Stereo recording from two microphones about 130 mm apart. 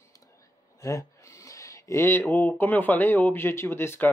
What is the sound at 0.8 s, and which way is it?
Speech, 25° left (ahead or behind).